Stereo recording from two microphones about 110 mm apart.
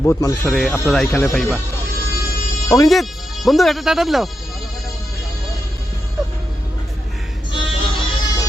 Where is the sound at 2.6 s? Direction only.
30° left (ahead or behind).